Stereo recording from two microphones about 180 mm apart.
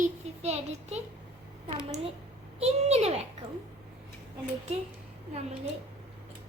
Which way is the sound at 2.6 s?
35° right (ahead or behind).